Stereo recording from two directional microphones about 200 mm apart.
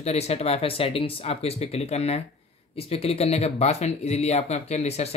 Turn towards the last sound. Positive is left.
turn(degrees=30)  # may be behind; listen again after turning